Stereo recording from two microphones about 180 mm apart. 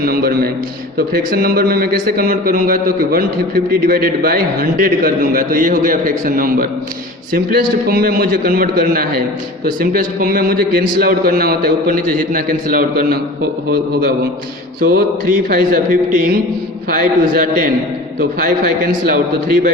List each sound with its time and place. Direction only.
0.0 s a man's voice: 55° right (ahead or behind)
14.8 s a man's voice: 55° right (ahead or behind)